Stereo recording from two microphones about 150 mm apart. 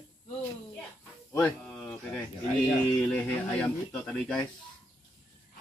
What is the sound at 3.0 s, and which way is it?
Speech, 10° left (ahead or behind).